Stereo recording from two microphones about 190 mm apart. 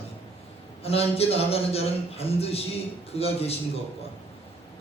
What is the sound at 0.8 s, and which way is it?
A man's voice, 30° left (ahead or behind).